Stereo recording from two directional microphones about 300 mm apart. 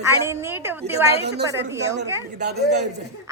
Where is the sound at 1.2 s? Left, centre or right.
Right.